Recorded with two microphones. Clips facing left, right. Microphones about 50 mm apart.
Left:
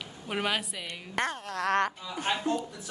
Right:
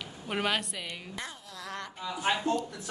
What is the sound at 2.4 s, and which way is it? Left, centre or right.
Speech, centre.